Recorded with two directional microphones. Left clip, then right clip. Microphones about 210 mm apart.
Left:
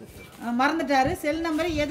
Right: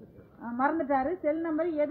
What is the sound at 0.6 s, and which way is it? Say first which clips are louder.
A woman's voice: left 5 dB; 60° left (ahead or behind).